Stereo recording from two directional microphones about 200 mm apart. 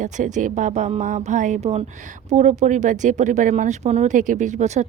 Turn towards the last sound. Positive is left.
turn(degrees=-35)  # may be behind; listen again after turning